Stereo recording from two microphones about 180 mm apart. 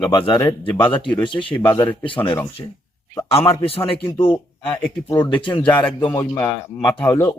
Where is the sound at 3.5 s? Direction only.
30° left (ahead or behind).